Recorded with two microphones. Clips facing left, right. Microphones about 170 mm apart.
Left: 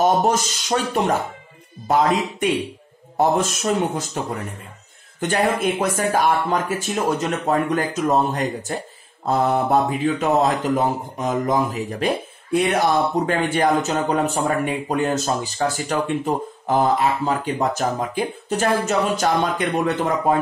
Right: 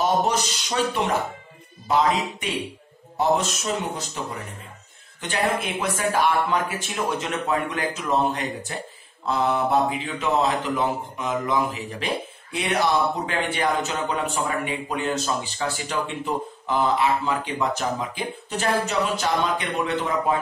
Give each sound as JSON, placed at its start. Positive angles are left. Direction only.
{"t": 0.0, "sound": "speech", "side_deg": 45}
{"t": 5.2, "sound": "speech", "side_deg": 45}